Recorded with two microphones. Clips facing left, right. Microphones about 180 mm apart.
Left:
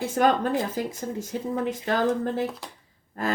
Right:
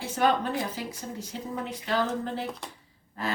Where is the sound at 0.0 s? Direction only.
45° left (ahead or behind).